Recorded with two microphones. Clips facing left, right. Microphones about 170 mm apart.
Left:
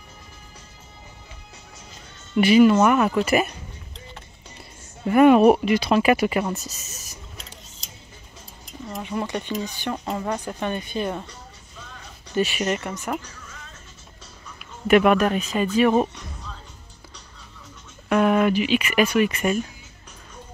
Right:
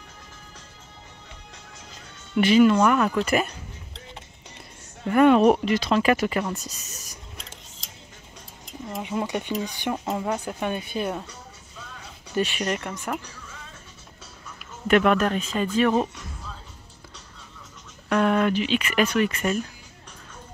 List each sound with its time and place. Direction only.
2.4 s speech: 10° left (ahead or behind)
5.0 s speech: 10° left (ahead or behind)
9.0 s speech: 15° right (ahead or behind); by 13.2 s 5° left (ahead or behind)
14.6 s speech: 10° left (ahead or behind)
18.0 s speech: 10° left (ahead or behind)